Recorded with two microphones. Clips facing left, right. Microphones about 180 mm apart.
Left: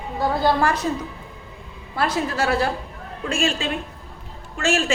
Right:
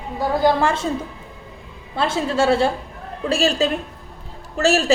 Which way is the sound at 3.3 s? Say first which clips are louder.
Right 5 dB; 35° right (ahead or behind).